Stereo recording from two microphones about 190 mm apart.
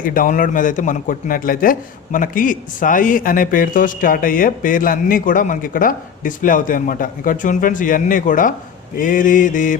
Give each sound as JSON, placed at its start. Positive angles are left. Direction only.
{"t": 0.0, "sound": "speech", "side_deg": 45}